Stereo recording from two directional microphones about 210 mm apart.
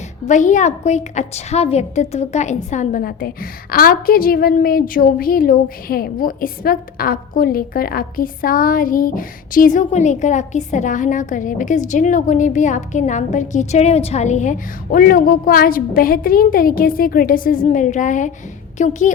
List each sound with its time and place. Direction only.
0.3 s a woman's voice: 35° left (ahead or behind)